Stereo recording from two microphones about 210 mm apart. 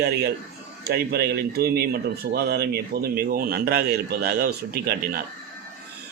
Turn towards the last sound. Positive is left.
turn(degrees=-45)  # may be behind; listen again after turning